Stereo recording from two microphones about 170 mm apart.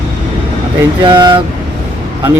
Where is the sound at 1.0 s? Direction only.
30° right (ahead or behind).